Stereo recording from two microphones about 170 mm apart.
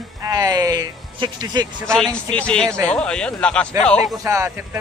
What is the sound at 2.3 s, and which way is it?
Speech, 5° left (ahead or behind).